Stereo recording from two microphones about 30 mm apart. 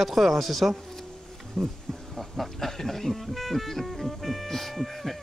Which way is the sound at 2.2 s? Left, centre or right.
Centre.